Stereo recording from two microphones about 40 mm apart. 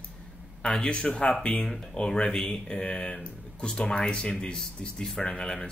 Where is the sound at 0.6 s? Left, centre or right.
Left.